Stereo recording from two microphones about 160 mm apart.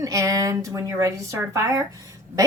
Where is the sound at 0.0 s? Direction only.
20° right (ahead or behind).